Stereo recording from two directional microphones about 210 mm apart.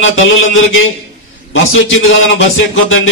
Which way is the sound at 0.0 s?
70° left (ahead or behind).